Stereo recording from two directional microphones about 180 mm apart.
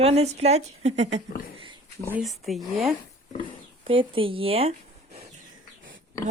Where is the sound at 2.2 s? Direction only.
Centre (ahead or behind).